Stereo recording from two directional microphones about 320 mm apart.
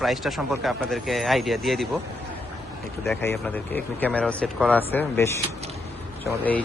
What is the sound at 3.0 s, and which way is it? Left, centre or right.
A man's voice, centre.